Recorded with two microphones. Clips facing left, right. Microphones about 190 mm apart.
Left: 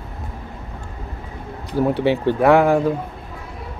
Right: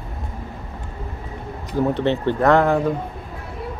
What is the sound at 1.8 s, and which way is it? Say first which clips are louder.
Speech: left 2 dB; 10° left (ahead or behind).